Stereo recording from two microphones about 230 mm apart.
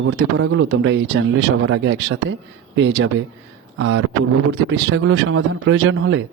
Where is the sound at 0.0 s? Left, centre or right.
Right.